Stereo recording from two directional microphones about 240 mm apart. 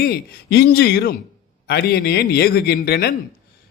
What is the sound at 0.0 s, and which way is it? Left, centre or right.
A man's voice, left.